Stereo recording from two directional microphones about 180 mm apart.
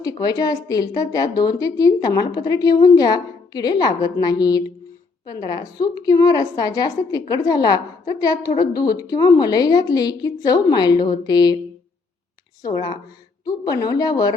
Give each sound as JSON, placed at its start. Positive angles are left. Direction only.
{"t": 0.0, "sound": "a woman's voice", "side_deg": 20}
{"t": 12.6, "sound": "a woman's voice", "side_deg": 25}